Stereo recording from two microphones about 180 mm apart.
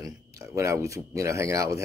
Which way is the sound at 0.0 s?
15° right (ahead or behind).